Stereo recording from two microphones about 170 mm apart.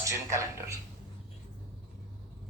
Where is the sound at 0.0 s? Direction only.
20° right (ahead or behind).